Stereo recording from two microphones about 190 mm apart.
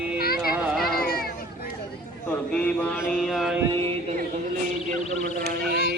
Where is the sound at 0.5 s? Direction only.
Centre (ahead or behind).